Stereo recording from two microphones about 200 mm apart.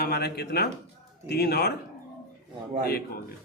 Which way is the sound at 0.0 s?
50° left (ahead or behind).